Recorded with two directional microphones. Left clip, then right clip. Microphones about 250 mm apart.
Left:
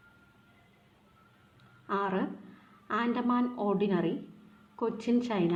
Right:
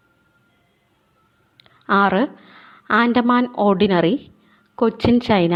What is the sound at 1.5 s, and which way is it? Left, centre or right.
A woman's voice, right.